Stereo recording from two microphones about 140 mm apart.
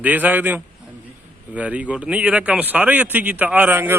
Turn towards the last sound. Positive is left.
turn(degrees=-15)  # may be behind; listen again after turning